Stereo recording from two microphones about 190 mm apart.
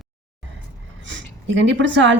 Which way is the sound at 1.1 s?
70° right (ahead or behind).